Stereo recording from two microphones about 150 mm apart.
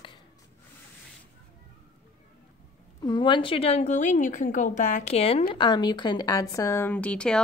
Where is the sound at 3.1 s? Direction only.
30° left (ahead or behind).